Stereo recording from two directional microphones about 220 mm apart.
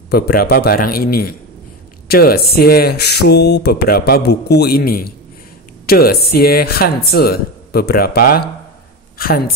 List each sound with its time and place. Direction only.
0.1 s speech: 40° left (ahead or behind)